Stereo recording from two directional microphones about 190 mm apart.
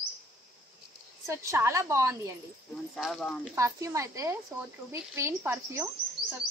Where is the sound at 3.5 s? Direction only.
15° right (ahead or behind).